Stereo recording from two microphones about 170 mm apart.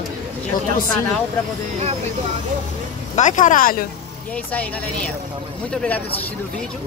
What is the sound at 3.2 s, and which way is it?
Speech, 45° left (ahead or behind).